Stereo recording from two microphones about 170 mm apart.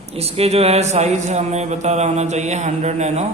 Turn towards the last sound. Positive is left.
turn(degrees=-40)  # may be behind; listen again after turning